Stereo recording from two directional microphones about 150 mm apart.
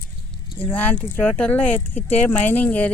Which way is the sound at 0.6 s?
10° left (ahead or behind).